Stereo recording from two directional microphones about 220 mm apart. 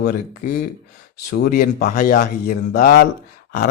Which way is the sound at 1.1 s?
45° left (ahead or behind).